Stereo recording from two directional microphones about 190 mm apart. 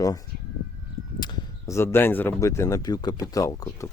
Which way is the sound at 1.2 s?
20° left (ahead or behind).